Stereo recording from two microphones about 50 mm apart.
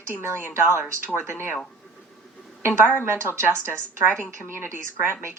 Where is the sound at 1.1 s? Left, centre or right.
Right.